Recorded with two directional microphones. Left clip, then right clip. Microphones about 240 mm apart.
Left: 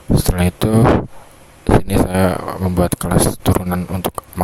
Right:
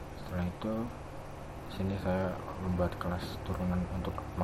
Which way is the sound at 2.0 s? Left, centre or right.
Left.